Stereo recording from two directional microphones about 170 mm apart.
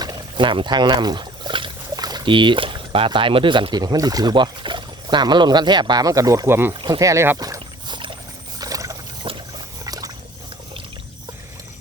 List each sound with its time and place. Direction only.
0.0 s speech: 25° right (ahead or behind)
6.8 s rowboat: 20° right (ahead or behind)
9.2 s a sound: 30° right (ahead or behind)